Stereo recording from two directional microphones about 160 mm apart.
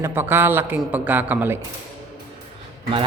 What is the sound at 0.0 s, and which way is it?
A man's voice, 15° right (ahead or behind).